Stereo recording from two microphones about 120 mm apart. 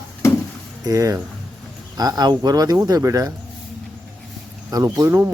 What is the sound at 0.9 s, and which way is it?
Speech, 30° right (ahead or behind).